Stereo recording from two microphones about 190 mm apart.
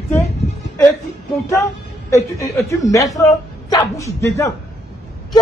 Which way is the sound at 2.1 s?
15° left (ahead or behind).